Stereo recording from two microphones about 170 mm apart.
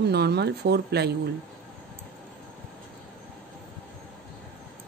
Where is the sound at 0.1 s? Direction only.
75° right (ahead or behind).